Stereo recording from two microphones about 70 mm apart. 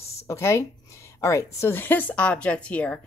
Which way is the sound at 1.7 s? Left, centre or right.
Left.